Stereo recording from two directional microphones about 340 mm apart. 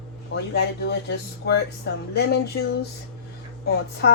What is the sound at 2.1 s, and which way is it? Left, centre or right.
Speech, left.